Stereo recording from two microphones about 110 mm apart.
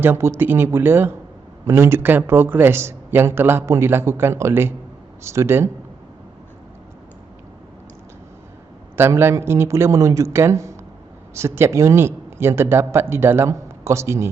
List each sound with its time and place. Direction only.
0.0 s speech: 20° right (ahead or behind)
9.0 s speech: 20° right (ahead or behind)